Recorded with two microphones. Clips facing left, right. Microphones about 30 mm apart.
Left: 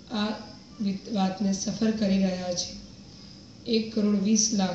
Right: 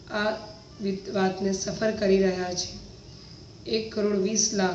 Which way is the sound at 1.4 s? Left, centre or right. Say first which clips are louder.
Right 1 dB; right.